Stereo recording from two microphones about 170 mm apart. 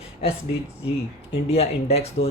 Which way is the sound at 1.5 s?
35° left (ahead or behind).